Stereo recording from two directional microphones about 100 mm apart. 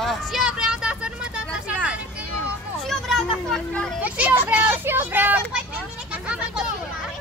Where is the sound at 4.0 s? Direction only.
15° right (ahead or behind).